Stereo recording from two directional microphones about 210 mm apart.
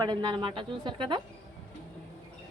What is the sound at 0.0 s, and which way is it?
A woman's voice, 20° right (ahead or behind).